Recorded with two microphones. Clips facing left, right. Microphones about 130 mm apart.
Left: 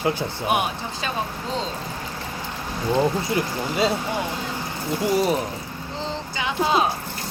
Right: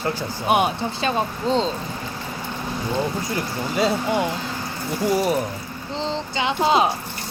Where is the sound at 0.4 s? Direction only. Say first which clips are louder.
Right 5 dB; 30° right (ahead or behind).